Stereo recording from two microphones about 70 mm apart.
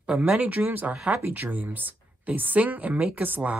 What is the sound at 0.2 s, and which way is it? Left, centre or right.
Speech, right.